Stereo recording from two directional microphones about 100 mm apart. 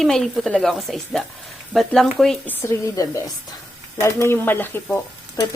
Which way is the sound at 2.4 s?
30° left (ahead or behind).